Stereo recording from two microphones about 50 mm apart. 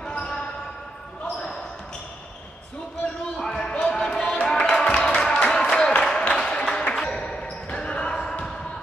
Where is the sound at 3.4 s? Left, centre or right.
Centre.